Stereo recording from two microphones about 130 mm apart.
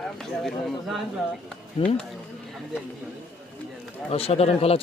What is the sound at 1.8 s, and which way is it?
Speech, 50° left (ahead or behind).